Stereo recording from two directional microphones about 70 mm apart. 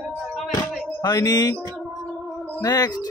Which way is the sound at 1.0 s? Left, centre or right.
Left.